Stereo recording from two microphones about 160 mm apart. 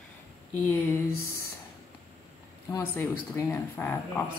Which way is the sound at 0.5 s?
15° left (ahead or behind).